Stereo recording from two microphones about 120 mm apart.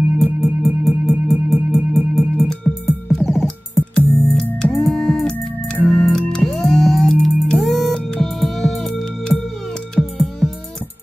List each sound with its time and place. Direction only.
0.2 s music: centre (ahead or behind)
4.8 s music: centre (ahead or behind)